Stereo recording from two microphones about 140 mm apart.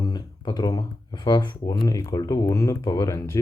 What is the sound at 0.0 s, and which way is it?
Speech, 30° left (ahead or behind).